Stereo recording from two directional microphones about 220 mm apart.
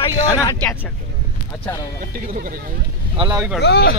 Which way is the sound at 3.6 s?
50° left (ahead or behind).